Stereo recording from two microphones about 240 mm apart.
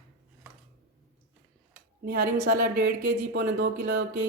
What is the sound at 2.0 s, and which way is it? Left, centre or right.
Speech, right.